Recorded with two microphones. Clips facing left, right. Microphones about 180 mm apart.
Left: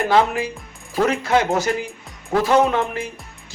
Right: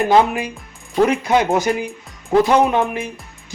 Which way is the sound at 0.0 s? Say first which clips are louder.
Right 3 dB; 15° right (ahead or behind).